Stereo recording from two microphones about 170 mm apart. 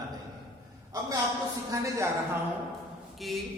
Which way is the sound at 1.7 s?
15° right (ahead or behind).